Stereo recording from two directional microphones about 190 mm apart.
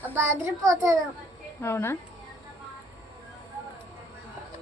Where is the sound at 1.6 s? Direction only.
15° left (ahead or behind).